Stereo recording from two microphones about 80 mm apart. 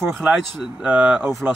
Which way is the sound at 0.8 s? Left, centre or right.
Centre.